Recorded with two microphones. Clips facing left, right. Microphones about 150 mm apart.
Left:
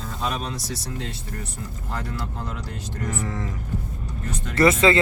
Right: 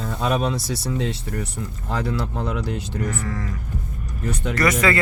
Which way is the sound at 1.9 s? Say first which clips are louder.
Right 7 dB; 75° right (ahead or behind).